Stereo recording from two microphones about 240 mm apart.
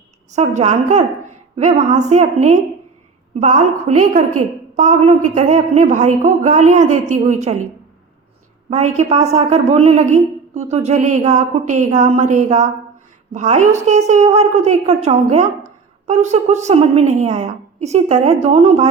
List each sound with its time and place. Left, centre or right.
0.3 s a woman's voice: right
8.7 s a woman's voice: right